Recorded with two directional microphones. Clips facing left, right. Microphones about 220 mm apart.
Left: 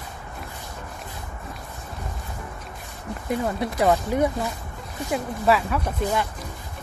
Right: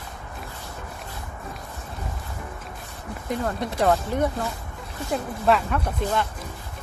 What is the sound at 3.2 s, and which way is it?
Speech, 5° left (ahead or behind).